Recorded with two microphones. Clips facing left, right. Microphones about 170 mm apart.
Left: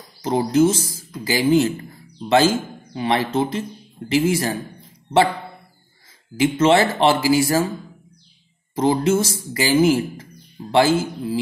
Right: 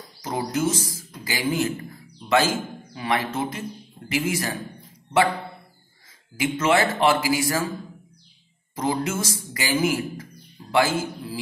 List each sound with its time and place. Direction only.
0.2 s speech: 30° left (ahead or behind)
6.3 s speech: 30° left (ahead or behind)
8.7 s speech: 30° left (ahead or behind)